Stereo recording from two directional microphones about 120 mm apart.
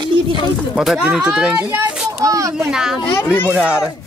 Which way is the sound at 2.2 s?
25° right (ahead or behind).